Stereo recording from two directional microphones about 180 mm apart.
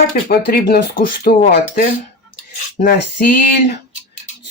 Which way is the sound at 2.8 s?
45° left (ahead or behind).